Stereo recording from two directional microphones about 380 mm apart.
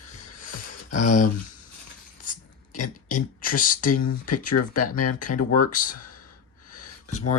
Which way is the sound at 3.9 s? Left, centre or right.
Left.